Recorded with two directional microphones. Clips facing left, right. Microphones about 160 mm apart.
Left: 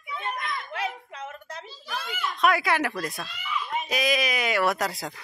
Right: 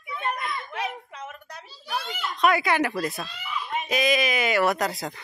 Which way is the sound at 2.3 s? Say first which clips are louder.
Right 2 dB; centre (ahead or behind).